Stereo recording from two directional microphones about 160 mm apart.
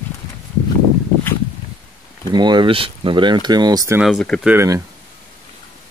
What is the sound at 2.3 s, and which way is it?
Speech, 25° right (ahead or behind).